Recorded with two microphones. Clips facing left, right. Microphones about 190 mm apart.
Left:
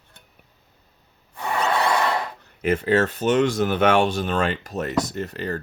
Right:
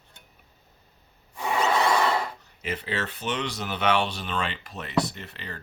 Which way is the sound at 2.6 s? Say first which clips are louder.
Left 11 dB; 50° left (ahead or behind).